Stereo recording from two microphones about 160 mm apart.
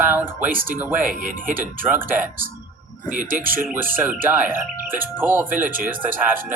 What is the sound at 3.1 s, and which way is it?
Speech, 60° right (ahead or behind).